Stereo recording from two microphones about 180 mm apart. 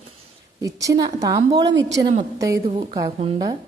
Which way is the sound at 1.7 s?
90° right.